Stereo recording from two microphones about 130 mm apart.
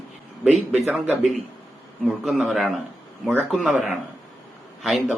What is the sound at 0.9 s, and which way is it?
Speech, 5° right (ahead or behind).